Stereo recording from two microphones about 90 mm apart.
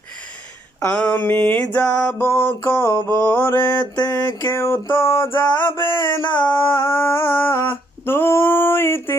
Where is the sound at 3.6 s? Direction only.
50° left (ahead or behind).